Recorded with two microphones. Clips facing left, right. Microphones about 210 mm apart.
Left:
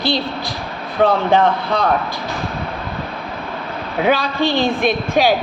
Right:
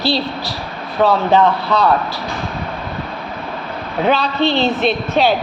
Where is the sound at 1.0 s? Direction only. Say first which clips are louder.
Right 1 dB; 50° left (ahead or behind).